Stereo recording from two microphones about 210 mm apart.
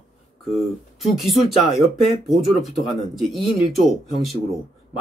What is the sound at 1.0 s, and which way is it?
Speech, centre (ahead or behind).